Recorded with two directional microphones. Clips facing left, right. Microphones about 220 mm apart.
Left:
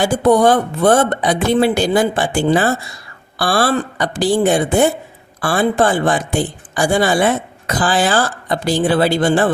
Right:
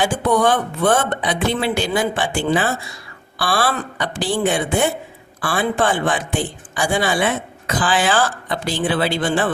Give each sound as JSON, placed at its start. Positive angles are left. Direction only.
{"t": 0.0, "sound": "speech", "side_deg": 40}